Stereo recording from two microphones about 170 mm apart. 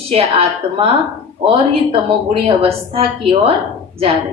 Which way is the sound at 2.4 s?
35° right (ahead or behind).